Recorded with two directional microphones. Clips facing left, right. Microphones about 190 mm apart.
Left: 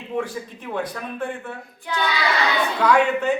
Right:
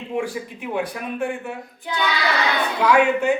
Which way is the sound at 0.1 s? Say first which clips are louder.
Right 1 dB; 15° right (ahead or behind).